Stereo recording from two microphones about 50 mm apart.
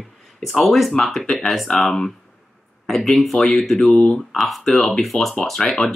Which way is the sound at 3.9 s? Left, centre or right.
Left.